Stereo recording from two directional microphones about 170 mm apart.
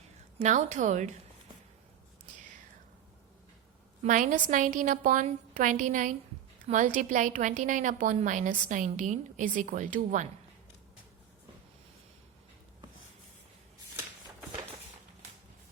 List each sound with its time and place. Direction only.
0.3 s a woman's voice: 45° right (ahead or behind)
4.0 s a woman's voice: 50° right (ahead or behind)